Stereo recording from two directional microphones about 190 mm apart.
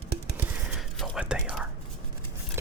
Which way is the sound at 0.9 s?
5° right (ahead or behind).